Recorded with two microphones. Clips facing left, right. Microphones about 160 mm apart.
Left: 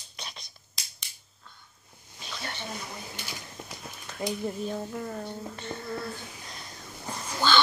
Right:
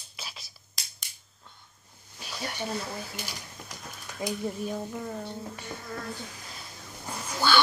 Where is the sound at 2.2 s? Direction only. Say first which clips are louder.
Right 3 dB; 10° right (ahead or behind).